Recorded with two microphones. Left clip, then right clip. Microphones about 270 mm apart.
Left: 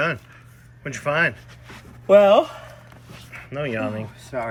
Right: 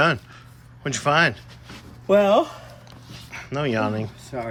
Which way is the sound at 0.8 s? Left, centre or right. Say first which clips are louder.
Right 2 dB; centre.